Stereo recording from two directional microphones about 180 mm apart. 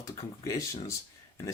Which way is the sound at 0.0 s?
15° left (ahead or behind).